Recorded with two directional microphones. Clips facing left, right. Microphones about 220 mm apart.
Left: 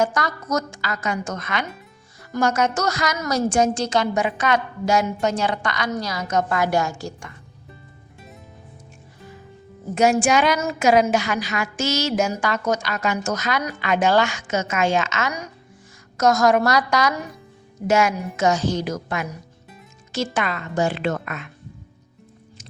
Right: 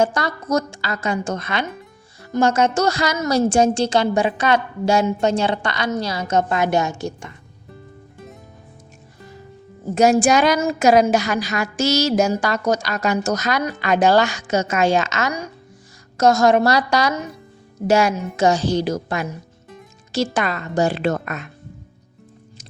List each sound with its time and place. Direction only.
0.0 s a woman's voice: 30° right (ahead or behind)
9.9 s a woman's voice: 35° right (ahead or behind)